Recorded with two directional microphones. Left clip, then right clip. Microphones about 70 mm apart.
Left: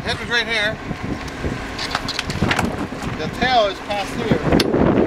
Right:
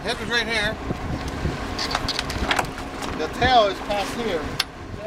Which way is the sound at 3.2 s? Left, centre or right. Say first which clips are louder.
Left 1 dB; left.